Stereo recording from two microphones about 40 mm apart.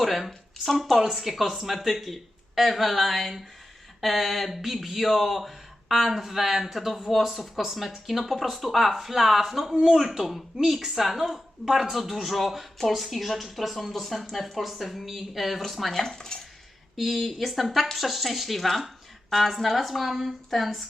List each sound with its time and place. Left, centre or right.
0.0 s speech: centre
16.1 s cutlery: centre
17.0 s speech: centre